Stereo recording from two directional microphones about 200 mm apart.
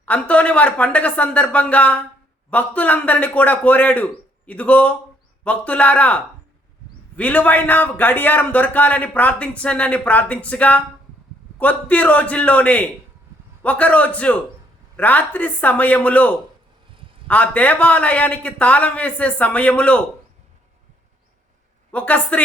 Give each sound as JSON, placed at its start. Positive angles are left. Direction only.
{"t": 0.0, "sound": "a man's voice", "side_deg": 5}
{"t": 21.9, "sound": "a man's voice", "side_deg": 10}